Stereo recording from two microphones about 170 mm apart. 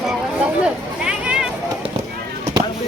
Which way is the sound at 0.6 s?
5° right (ahead or behind).